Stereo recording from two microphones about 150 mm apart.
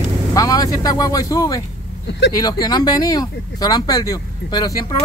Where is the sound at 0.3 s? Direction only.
25° left (ahead or behind).